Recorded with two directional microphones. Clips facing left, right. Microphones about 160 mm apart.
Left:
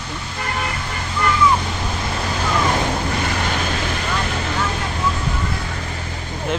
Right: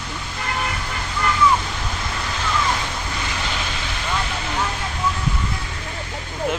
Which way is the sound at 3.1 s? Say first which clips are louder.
Left 5 dB; 50° left (ahead or behind).